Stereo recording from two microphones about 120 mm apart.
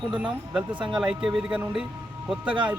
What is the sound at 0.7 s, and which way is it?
Speech, 40° right (ahead or behind).